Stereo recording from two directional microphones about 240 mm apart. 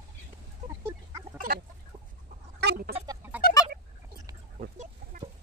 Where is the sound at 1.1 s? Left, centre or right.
Right.